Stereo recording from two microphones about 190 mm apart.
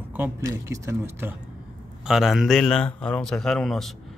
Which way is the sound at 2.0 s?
Centre (ahead or behind).